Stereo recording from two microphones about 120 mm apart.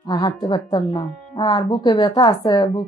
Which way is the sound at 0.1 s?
35° left (ahead or behind).